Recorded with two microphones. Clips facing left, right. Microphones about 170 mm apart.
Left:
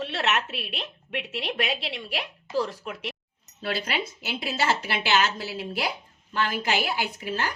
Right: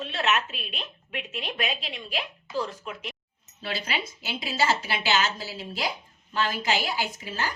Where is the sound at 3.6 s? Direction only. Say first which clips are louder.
Left 3 dB; 55° left (ahead or behind).